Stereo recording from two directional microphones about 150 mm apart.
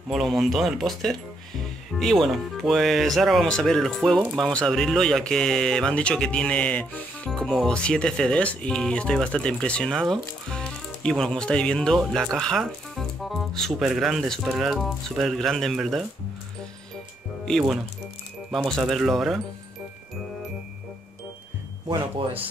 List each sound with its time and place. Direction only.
0.1 s speech: centre (ahead or behind)
17.5 s speech: centre (ahead or behind)
21.8 s speech: 40° right (ahead or behind)